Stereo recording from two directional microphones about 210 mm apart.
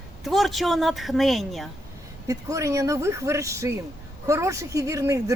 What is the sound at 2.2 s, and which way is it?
A woman's voice, 15° right (ahead or behind).